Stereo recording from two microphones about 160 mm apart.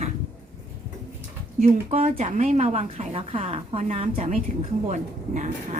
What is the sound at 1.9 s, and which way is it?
Speech, 45° right (ahead or behind).